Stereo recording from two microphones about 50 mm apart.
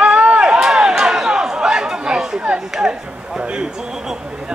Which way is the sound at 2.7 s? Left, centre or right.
Centre.